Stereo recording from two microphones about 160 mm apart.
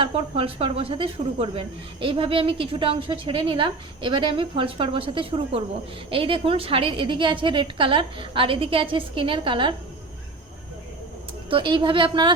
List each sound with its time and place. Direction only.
0.0 s speech: 35° right (ahead or behind)
11.4 s speech: 30° right (ahead or behind)